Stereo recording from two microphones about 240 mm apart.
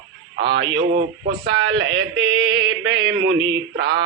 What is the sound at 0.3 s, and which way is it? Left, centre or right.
Speech, right.